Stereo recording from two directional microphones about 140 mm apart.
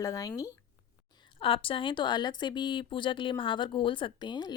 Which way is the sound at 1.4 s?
40° left (ahead or behind).